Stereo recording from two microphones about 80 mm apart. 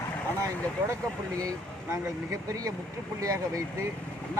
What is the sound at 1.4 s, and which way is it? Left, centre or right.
Speech, right.